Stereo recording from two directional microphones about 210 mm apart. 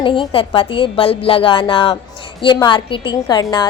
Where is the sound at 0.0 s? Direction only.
25° left (ahead or behind).